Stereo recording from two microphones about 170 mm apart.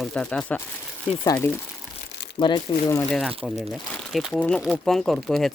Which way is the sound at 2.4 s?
25° left (ahead or behind).